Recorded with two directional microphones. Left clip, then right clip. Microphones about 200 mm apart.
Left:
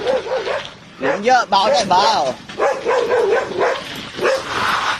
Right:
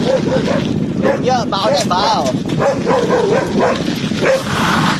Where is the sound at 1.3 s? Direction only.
35° left (ahead or behind).